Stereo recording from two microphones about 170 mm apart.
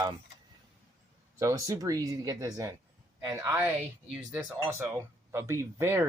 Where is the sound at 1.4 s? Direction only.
20° right (ahead or behind).